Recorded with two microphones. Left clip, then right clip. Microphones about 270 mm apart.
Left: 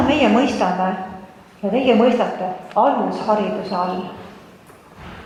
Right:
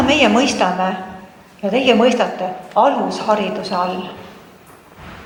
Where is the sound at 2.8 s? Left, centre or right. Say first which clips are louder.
Right 2 dB; centre.